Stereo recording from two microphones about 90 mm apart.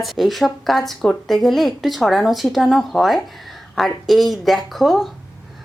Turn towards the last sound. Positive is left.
turn(degrees=0)  # may be behind; listen again after turning